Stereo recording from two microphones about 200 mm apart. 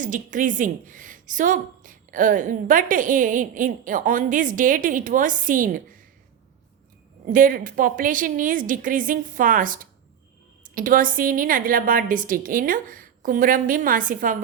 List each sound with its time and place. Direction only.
0.0 s a woman's voice: 40° right (ahead or behind)
7.3 s a woman's voice: 45° right (ahead or behind)